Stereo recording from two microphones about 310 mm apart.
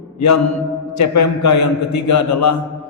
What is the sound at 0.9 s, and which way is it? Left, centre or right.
A man's voice, left.